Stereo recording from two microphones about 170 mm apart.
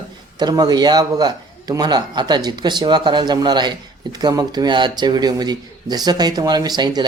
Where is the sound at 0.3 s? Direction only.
25° right (ahead or behind).